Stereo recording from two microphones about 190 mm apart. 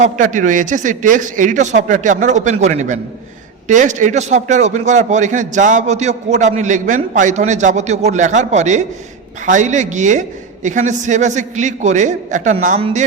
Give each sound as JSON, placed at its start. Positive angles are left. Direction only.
{"t": 0.0, "sound": "a man's voice", "side_deg": -40}